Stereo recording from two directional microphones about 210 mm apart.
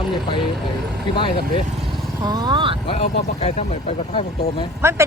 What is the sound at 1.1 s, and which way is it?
Speech, 25° left (ahead or behind).